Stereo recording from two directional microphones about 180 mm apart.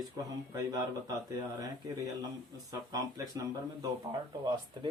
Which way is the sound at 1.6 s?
20° right (ahead or behind).